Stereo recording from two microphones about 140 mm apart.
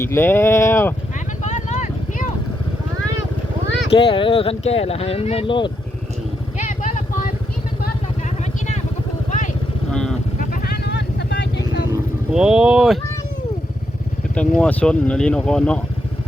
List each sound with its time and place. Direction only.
0.0 s speech: 15° left (ahead or behind)
1.4 s vehicle: 55° left (ahead or behind)
3.9 s speech: 40° left (ahead or behind)
6.6 s vehicle: 60° left (ahead or behind)
9.9 s vehicle: 5° left (ahead or behind)
10.5 s vehicle: 90° left
12.3 s speech: 5° right (ahead or behind)
14.3 s speech: 10° left (ahead or behind)